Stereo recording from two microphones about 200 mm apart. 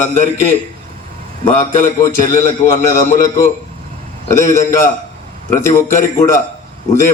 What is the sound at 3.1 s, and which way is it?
Speech, 40° left (ahead or behind).